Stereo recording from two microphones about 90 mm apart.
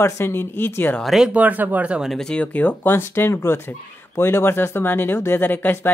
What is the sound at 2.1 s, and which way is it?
Speech, 5° left (ahead or behind).